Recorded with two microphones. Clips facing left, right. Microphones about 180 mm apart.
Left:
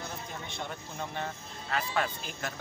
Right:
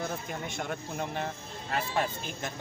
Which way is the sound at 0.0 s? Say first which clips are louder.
Right 5 dB; 50° right (ahead or behind).